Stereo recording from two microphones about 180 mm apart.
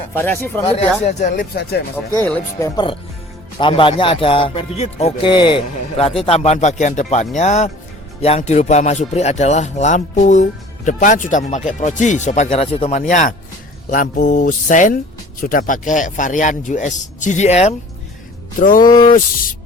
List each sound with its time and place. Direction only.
0.1 s speech: 10° left (ahead or behind)
0.6 s speech: 30° left (ahead or behind)
2.2 s speech: 15° left (ahead or behind)
3.6 s speech: 30° left (ahead or behind)
18.8 s speech: 25° left (ahead or behind)